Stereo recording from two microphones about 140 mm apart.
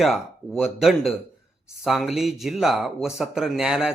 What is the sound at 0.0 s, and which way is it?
Speech, centre (ahead or behind).